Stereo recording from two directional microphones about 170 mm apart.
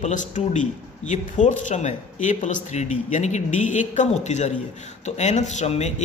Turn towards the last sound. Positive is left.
turn(degrees=40)  # may be behind; listen again after turning